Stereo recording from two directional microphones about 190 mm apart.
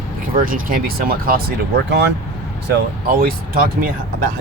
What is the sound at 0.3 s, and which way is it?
Speech, 50° right (ahead or behind).